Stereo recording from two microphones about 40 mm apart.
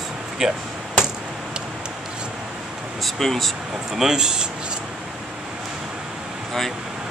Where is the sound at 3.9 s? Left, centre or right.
Centre.